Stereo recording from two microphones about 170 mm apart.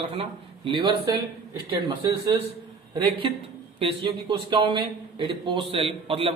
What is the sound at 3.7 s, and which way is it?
A man's voice, 30° right (ahead or behind).